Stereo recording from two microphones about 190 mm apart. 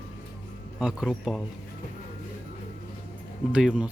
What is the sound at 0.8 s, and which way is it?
Speech, 5° right (ahead or behind).